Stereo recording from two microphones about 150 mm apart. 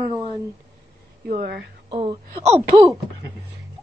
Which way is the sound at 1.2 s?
75° right (ahead or behind).